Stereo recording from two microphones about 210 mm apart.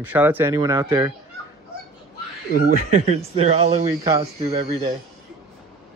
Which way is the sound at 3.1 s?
30° right (ahead or behind).